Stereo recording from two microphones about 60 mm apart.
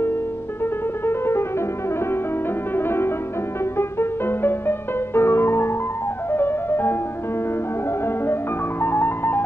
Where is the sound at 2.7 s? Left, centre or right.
Left.